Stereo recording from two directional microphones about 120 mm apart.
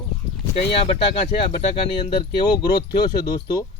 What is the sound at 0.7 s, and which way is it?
Speech, 50° left (ahead or behind).